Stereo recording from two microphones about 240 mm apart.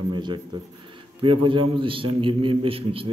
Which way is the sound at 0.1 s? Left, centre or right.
Centre.